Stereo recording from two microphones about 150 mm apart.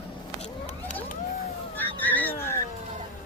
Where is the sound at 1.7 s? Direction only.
10° left (ahead or behind).